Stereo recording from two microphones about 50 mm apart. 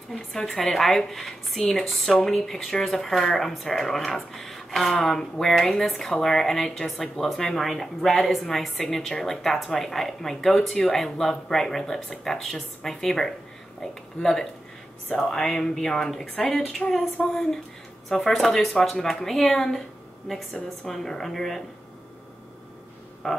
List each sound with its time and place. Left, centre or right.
0.1 s speech: centre
1.9 s speech: centre
15.0 s speech: centre
23.2 s speech: centre